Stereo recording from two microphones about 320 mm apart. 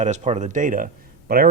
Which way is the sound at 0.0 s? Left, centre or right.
Right.